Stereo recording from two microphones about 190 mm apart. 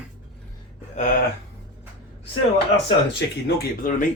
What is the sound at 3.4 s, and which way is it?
Speech, 45° left (ahead or behind).